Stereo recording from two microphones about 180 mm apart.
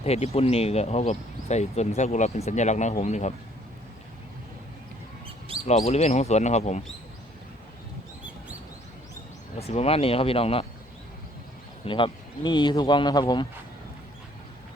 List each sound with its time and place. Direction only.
0.0 s speech: 35° left (ahead or behind)
5.6 s speech: 35° left (ahead or behind)
9.6 s speech: 35° left (ahead or behind)
11.9 s speech: 30° left (ahead or behind)